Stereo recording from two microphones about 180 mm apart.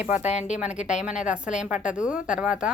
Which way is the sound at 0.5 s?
5° right (ahead or behind).